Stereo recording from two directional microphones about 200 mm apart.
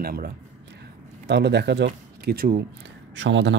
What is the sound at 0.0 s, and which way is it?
Speech, 50° right (ahead or behind).